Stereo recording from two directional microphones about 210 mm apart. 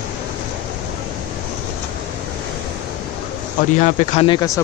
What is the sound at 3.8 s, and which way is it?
Speech, 30° left (ahead or behind).